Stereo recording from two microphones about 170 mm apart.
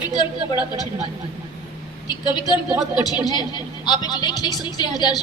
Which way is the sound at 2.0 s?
25° left (ahead or behind).